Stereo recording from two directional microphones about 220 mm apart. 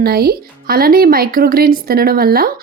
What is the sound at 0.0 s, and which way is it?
Speech, 45° right (ahead or behind).